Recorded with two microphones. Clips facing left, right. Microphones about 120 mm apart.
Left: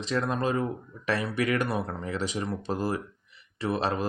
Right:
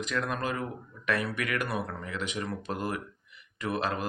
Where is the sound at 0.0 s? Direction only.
30° left (ahead or behind).